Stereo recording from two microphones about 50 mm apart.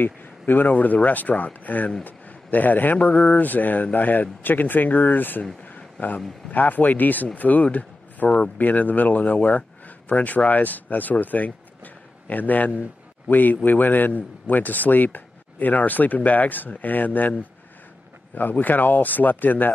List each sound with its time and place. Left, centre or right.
0.0 s a man's voice: left
5.8 s a sound: left
6.5 s a man's voice: left